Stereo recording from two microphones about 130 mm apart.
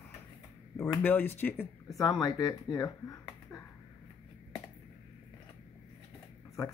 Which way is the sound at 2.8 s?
25° left (ahead or behind).